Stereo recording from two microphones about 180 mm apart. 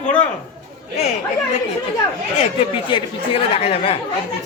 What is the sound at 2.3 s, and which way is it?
Speech, 30° left (ahead or behind).